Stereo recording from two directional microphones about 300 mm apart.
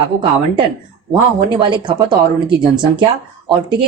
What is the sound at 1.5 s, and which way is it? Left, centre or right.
A woman's voice, centre.